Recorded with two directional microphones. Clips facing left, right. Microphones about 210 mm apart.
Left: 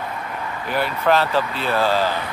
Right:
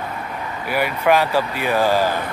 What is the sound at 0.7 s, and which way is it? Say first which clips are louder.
Speech: right 2 dB; 10° right (ahead or behind).